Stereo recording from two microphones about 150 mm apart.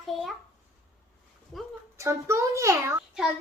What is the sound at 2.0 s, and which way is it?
A child's voice, 20° right (ahead or behind).